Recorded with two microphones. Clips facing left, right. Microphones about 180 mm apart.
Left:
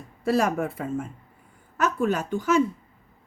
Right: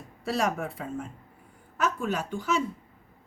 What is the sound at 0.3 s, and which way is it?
Speech, 50° left (ahead or behind).